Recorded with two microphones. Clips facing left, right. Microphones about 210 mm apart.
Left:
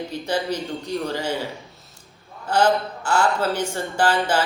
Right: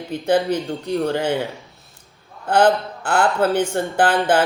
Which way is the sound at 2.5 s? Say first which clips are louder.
Right 3 dB; 55° right (ahead or behind).